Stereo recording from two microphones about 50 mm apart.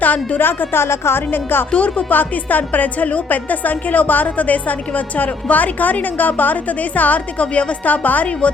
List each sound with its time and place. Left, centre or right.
0.0 s speech: left
1.7 s speech: left
2.0 s a woman's voice: left